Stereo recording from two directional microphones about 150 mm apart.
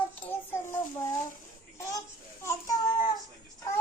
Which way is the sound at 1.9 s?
20° left (ahead or behind).